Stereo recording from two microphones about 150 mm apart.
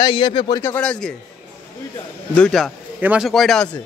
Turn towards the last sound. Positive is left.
turn(degrees=0)  # may be behind; listen again after turning